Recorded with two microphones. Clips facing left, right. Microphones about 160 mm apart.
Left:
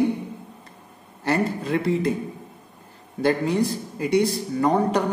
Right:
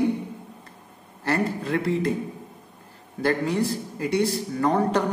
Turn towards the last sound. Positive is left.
turn(degrees=15)  # may be behind; listen again after turning